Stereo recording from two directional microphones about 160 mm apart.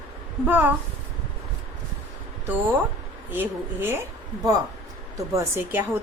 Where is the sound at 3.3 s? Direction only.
15° right (ahead or behind).